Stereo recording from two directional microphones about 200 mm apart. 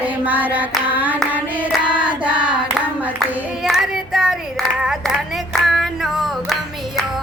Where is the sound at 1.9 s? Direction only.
5° right (ahead or behind).